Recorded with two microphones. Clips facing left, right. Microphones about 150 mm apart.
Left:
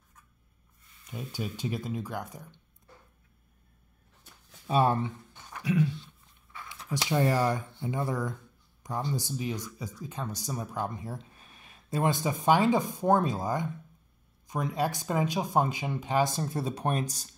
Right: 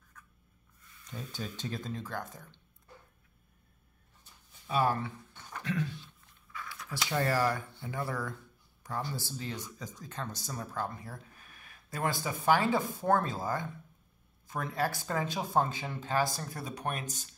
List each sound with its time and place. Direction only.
1.0 s speech: 10° left (ahead or behind)
4.6 s speech: 25° left (ahead or behind)
5.5 s a sound: 10° left (ahead or behind)
6.5 s speech: 25° left (ahead or behind)